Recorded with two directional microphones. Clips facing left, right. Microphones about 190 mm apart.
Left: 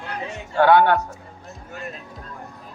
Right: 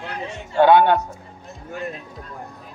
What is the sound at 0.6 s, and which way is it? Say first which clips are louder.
Speech: right 1 dB; 20° right (ahead or behind).